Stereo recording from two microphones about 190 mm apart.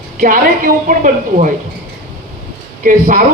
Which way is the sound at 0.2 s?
45° right (ahead or behind).